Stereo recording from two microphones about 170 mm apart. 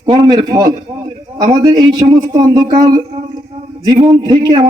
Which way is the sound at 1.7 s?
20° right (ahead or behind).